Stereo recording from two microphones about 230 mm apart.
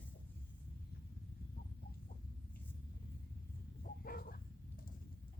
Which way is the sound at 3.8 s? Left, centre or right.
Left.